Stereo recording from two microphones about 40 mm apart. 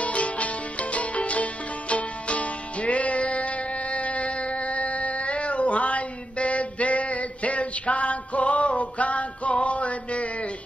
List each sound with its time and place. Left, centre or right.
0.0 s music: left